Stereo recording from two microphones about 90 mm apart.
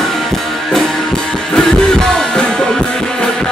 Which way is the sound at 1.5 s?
5° left (ahead or behind).